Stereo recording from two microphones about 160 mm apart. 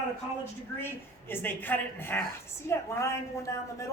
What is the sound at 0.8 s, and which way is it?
A woman's voice, 15° left (ahead or behind).